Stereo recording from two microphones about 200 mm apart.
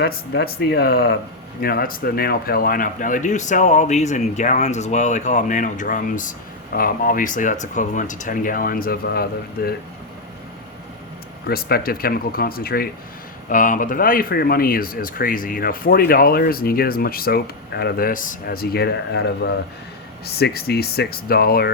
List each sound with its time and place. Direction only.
0.0 s speech: 50° left (ahead or behind)
11.4 s speech: 50° left (ahead or behind)